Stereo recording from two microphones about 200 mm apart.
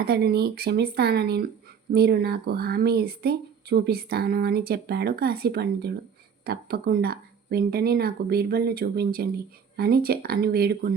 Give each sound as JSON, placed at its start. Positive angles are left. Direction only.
{"t": 0.0, "sound": "speech", "side_deg": -50}